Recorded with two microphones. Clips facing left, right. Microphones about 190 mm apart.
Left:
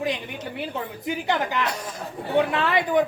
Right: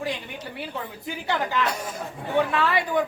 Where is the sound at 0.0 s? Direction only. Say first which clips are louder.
Left 3 dB; 20° left (ahead or behind).